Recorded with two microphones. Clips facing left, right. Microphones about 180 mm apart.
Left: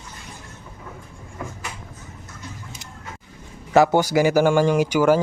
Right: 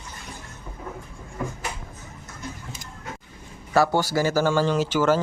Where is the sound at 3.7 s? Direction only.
20° left (ahead or behind).